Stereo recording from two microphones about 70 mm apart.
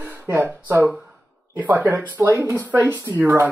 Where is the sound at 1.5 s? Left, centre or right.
Right.